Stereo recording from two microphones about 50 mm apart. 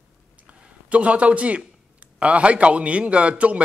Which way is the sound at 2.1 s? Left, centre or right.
Right.